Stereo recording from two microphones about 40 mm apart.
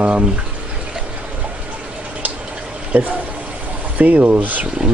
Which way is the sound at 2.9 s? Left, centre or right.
Right.